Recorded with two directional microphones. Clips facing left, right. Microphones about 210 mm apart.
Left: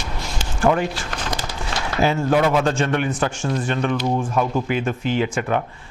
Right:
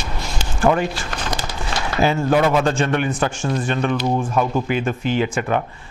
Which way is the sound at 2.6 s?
15° right (ahead or behind).